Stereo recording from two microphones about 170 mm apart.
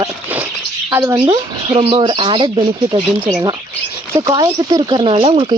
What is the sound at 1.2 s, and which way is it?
Speech, 30° right (ahead or behind).